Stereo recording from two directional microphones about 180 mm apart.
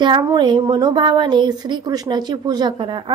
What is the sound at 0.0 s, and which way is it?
A woman's voice, 25° right (ahead or behind).